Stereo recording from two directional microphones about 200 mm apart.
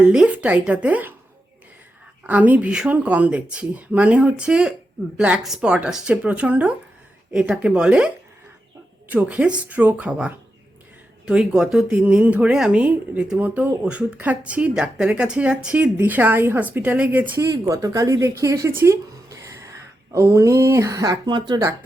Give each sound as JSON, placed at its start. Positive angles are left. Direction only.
{"t": 0.0, "sound": "speech", "side_deg": -5}
{"t": 2.2, "sound": "a woman's voice", "side_deg": -10}
{"t": 19.5, "sound": "a sound", "side_deg": -15}
{"t": 20.1, "sound": "speech", "side_deg": -15}